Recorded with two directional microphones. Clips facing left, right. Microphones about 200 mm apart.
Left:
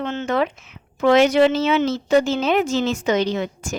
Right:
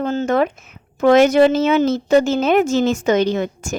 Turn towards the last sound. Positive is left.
turn(degrees=-45)  # may be behind; listen again after turning